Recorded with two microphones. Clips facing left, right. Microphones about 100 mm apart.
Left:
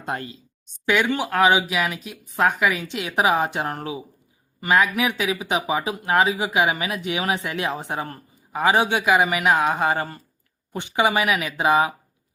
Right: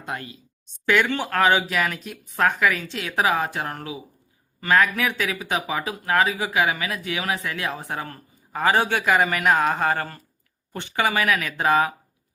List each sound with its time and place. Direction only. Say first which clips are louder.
0.0 s a woman's voice: left 3 dB; 35° left (ahead or behind)
0.9 s speech: even; 10° left (ahead or behind)
2.3 s speech: left 1 dB; 15° left (ahead or behind)
4.6 s speech: left 1 dB; 15° left (ahead or behind)